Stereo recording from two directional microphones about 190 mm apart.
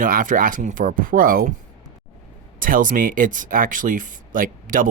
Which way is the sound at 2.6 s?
45° right (ahead or behind).